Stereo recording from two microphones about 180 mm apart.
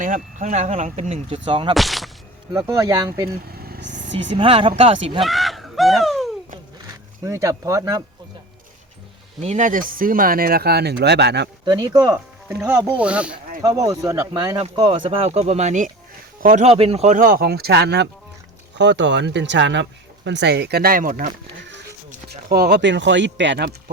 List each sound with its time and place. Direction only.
0.0 s speech: 45° right (ahead or behind); by 1.7 s 25° right (ahead or behind)
1.7 s speech: centre (ahead or behind)
2.5 s speech: 20° right (ahead or behind)
3.5 s vehicle: 55° right (ahead or behind)
4.4 s speech: 30° right (ahead or behind)
5.2 s a sound: centre (ahead or behind)
7.3 s speech: 20° right (ahead or behind)
9.4 s speech: 40° right (ahead or behind); by 11.4 s 70° right (ahead or behind)
11.6 s speech: 20° right (ahead or behind)
12.5 s speech: 10° right (ahead or behind)
13.6 s speech: 20° right (ahead or behind); by 16.6 s 50° right (ahead or behind)
16.6 s speech: 35° right (ahead or behind); by 23.7 s 80° right